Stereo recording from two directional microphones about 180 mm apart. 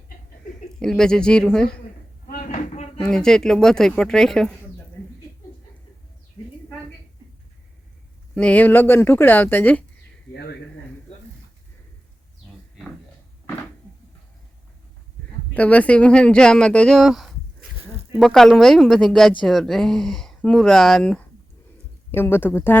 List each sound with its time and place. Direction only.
0.8 s speech: 5° left (ahead or behind)
2.2 s a sound: 50° left (ahead or behind)
3.0 s speech: 5° left (ahead or behind)
8.4 s speech: 10° left (ahead or behind)
10.3 s speech: 70° left (ahead or behind)
15.5 s speech: 5° left (ahead or behind)